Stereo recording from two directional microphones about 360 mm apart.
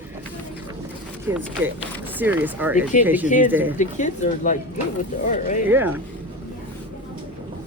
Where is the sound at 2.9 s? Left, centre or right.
Left.